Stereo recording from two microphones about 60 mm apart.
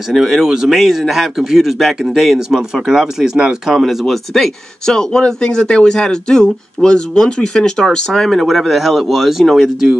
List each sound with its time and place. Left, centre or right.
0.1 s speech: centre